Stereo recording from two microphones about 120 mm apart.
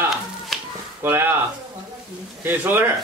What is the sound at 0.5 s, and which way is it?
Finger snapping, centre (ahead or behind).